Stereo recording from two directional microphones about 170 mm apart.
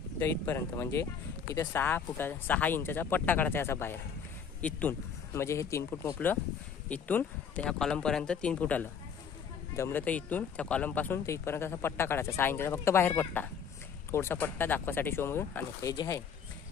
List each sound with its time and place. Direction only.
0.2 s speech: 15° left (ahead or behind)